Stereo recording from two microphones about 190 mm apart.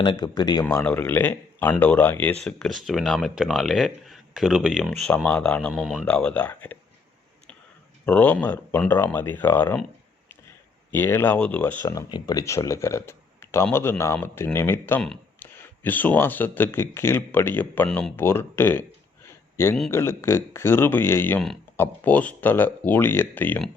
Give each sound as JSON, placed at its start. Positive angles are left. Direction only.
{"t": 0.0, "sound": "speech", "side_deg": 25}
{"t": 0.6, "sound": "speech", "side_deg": 10}
{"t": 8.0, "sound": "speech", "side_deg": 10}
{"t": 10.9, "sound": "speech", "side_deg": 10}
{"t": 11.9, "sound": "speech", "side_deg": 20}
{"t": 19.2, "sound": "a sound", "side_deg": 15}
{"t": 19.9, "sound": "speech", "side_deg": 15}